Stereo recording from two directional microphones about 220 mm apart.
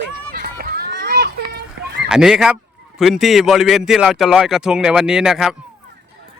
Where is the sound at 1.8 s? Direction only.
50° right (ahead or behind).